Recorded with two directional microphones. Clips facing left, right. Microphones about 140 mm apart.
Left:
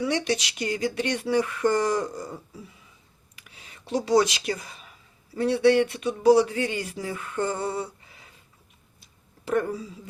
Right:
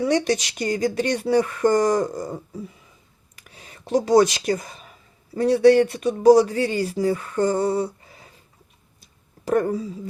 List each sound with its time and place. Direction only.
0.0 s speech: 40° right (ahead or behind)
3.3 s a sound: 45° right (ahead or behind)
5.3 s speech: 40° right (ahead or behind)
9.4 s speech: 40° right (ahead or behind)